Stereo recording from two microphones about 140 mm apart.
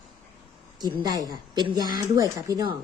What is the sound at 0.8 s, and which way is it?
Speech, 30° right (ahead or behind).